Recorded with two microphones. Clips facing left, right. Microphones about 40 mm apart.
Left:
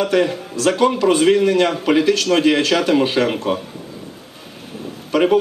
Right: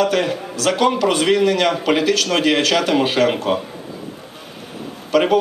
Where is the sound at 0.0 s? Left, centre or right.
Right.